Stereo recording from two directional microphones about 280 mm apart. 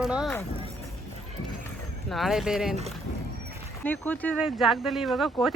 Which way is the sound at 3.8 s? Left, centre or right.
Centre.